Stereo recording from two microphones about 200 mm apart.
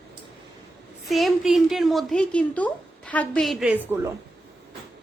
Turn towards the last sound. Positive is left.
turn(degrees=-10)  # may be behind; listen again after turning